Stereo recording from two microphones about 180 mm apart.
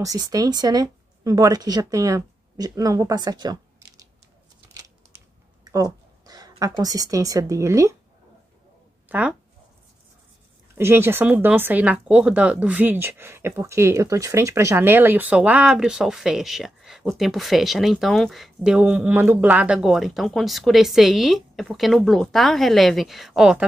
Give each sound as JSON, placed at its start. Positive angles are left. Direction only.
{"t": 0.0, "sound": "speech", "side_deg": -20}
{"t": 4.7, "sound": "a sound", "side_deg": -20}
{"t": 10.7, "sound": "speech", "side_deg": -15}